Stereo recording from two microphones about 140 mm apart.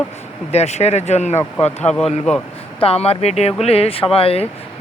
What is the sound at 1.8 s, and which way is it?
Speech, 5° left (ahead or behind).